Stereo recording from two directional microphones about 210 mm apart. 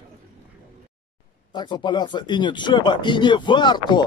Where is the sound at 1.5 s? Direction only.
20° left (ahead or behind).